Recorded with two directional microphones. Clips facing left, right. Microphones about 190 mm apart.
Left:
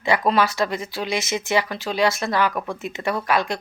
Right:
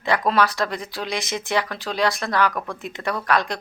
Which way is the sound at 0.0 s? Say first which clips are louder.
Left 1 dB; centre (ahead or behind).